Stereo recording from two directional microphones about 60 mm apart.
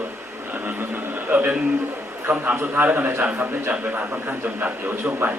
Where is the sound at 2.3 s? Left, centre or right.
Right.